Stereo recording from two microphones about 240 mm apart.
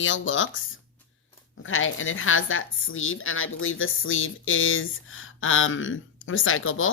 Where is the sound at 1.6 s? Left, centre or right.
Left.